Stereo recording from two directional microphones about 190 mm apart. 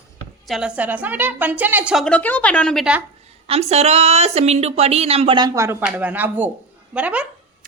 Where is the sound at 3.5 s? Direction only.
35° right (ahead or behind).